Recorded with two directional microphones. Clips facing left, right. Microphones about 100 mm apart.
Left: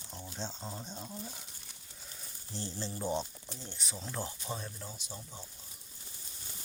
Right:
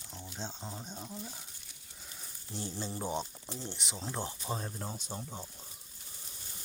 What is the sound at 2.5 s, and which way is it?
Speech, 15° right (ahead or behind).